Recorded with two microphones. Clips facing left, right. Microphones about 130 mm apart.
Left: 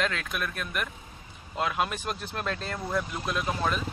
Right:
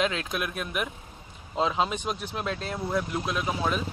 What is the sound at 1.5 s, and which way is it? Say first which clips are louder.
Speech: right 3 dB; 20° right (ahead or behind).